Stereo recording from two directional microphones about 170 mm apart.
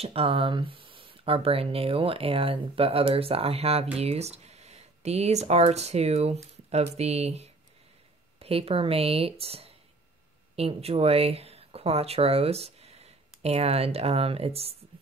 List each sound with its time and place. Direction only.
0.0 s speech: 35° right (ahead or behind)